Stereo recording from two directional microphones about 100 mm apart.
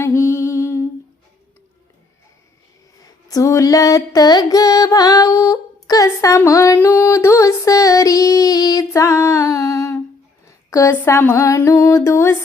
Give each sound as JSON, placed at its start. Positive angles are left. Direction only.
{"t": 0.0, "sound": "music", "side_deg": 30}
{"t": 3.0, "sound": "female singing", "side_deg": 40}
{"t": 10.4, "sound": "a sound", "side_deg": 30}